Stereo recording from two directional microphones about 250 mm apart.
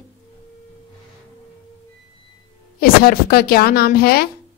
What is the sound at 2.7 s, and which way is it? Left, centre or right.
A woman's voice, left.